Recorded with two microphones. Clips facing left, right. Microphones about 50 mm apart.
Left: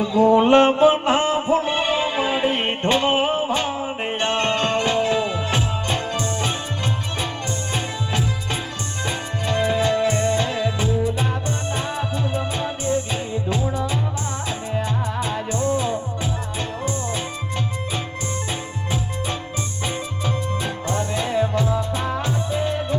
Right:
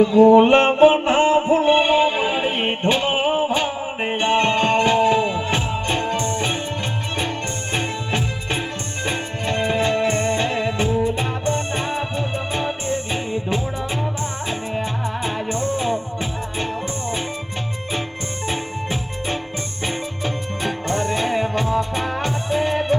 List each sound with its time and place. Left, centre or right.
0.0 s music: right
7.7 s music: right
15.2 s music: right
19.8 s music: right
22.2 s music: right